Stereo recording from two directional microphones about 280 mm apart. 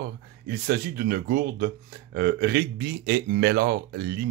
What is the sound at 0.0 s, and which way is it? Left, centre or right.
Speech, right.